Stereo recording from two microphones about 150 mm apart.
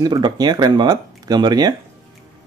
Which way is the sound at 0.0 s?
30° right (ahead or behind).